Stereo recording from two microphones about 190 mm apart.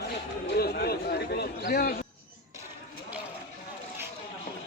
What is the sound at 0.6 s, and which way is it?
A man's voice, 55° left (ahead or behind).